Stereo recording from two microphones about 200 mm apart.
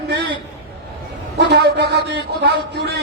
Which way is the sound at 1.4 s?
60° right (ahead or behind).